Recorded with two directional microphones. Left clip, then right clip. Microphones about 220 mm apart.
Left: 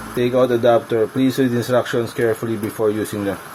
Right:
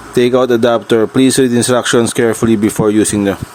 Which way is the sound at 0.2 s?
45° right (ahead or behind).